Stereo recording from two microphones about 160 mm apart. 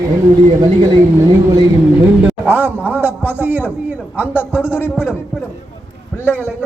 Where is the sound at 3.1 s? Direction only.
15° left (ahead or behind).